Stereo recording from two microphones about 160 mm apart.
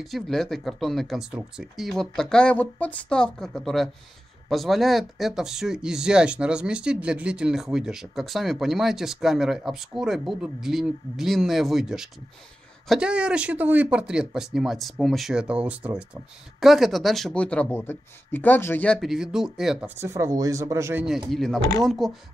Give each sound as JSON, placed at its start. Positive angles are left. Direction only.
{"t": 0.0, "sound": "speech", "side_deg": 0}
{"t": 18.9, "sound": "speech", "side_deg": -5}
{"t": 20.0, "sound": "speech", "side_deg": -20}
{"t": 21.3, "sound": "speech", "side_deg": 0}